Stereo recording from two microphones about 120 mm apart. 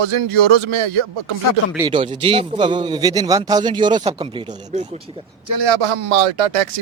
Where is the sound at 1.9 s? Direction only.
45° right (ahead or behind).